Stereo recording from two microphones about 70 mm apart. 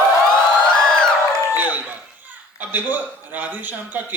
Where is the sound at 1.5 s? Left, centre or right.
Right.